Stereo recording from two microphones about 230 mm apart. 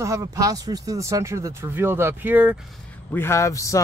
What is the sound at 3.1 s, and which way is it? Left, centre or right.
Speech, centre.